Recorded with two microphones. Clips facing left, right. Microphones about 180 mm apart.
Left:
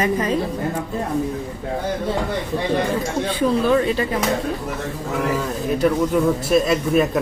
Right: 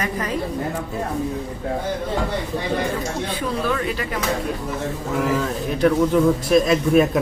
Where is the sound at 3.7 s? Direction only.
25° left (ahead or behind).